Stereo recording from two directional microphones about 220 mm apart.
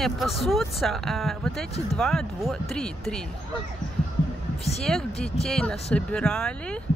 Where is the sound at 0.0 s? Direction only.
Centre (ahead or behind).